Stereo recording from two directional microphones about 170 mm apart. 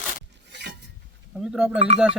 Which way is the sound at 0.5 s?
80° right.